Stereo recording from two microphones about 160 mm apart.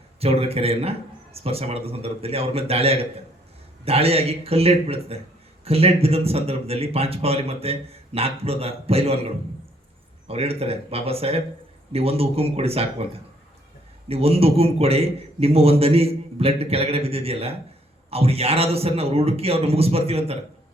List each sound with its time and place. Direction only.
0.2 s a man's voice: 40° right (ahead or behind)
14.1 s a man's voice: 40° right (ahead or behind)